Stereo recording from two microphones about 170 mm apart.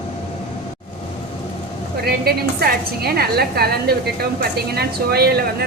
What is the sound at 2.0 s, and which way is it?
A woman's voice, 65° right (ahead or behind).